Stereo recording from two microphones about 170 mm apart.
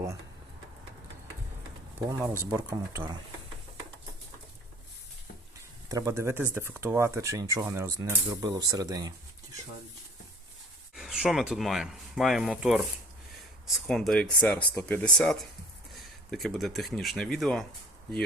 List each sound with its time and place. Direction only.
2.0 s speech: 15° right (ahead or behind)
5.9 s speech: 20° right (ahead or behind)
10.9 s speech: 5° right (ahead or behind)
13.8 s speech: centre (ahead or behind)